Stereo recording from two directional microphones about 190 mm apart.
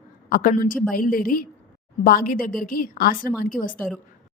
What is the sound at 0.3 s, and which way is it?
A woman's voice, 50° left (ahead or behind).